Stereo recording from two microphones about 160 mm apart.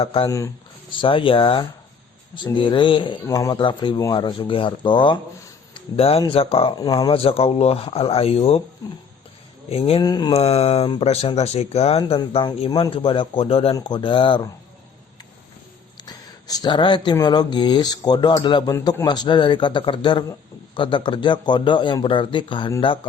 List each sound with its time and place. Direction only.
0.0 s speech: 35° left (ahead or behind)
0.3 s speech: 20° left (ahead or behind)
0.9 s speech: 35° left (ahead or behind)
3.2 s speech: 20° left (ahead or behind); by 6.7 s 35° left (ahead or behind)
6.7 s speech: 25° left (ahead or behind)
9.6 s speech: 40° left (ahead or behind)
10.0 s speech: 25° left (ahead or behind)
10.3 s speech: 40° left (ahead or behind)
16.0 s speech: 25° left (ahead or behind)